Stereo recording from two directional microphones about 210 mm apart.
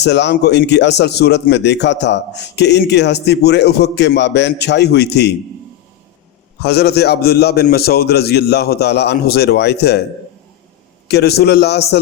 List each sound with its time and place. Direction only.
0.0 s a man's voice: 55° left (ahead or behind)
6.6 s a man's voice: 50° left (ahead or behind)
11.1 s a man's voice: 50° left (ahead or behind)